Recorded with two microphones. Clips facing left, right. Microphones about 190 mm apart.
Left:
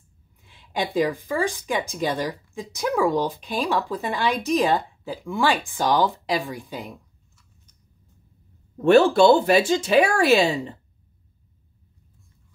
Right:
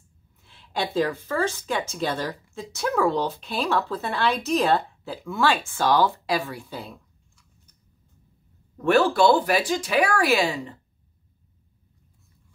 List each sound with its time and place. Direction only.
0.4 s speech: 15° left (ahead or behind)
8.7 s speech: 25° left (ahead or behind)